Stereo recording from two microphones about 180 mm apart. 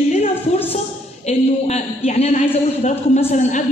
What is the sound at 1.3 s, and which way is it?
A man's voice, 35° left (ahead or behind).